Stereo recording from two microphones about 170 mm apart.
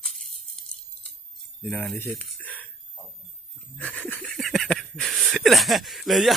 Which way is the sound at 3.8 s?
10° left (ahead or behind).